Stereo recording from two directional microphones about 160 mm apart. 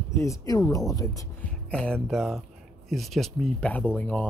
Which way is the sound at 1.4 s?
5° left (ahead or behind).